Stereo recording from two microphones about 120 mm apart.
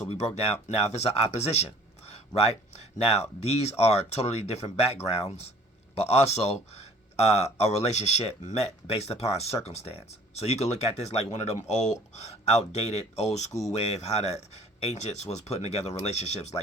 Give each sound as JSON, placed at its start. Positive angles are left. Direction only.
{"t": 0.4, "sound": "speech", "side_deg": 60}